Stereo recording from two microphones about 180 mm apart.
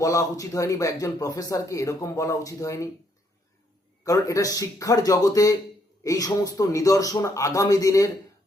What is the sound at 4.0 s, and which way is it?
Speech, 20° left (ahead or behind).